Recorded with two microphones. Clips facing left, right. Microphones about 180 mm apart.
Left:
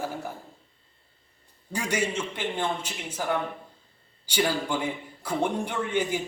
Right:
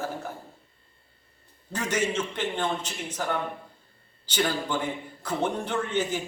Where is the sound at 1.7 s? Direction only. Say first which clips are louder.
Right 1 dB; 10° left (ahead or behind).